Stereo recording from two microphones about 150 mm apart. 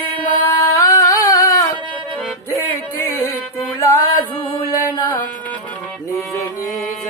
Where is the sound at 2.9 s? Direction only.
20° left (ahead or behind).